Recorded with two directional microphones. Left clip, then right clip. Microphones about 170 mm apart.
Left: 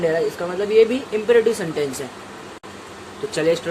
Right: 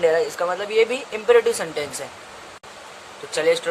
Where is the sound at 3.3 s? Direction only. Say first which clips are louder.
Even; 25° right (ahead or behind).